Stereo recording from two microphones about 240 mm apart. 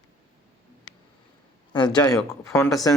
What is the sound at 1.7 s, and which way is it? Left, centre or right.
Speech, centre.